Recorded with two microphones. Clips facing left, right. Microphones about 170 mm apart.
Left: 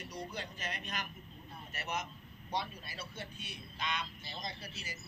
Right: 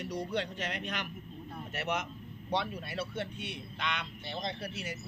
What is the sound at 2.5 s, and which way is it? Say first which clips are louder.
A man's voice: right 6 dB; 70° right (ahead or behind).